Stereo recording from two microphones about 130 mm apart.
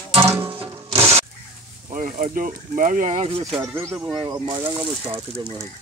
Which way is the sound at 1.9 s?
85° right.